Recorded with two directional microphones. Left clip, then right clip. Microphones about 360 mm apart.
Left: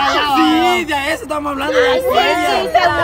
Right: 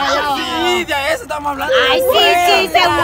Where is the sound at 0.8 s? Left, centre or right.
Centre.